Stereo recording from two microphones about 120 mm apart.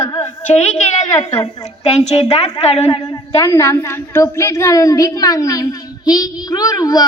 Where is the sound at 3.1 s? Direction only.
25° left (ahead or behind).